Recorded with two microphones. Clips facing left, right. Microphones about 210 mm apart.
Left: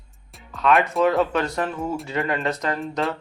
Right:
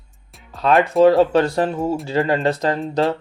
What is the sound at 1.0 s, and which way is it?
Speech, 30° right (ahead or behind).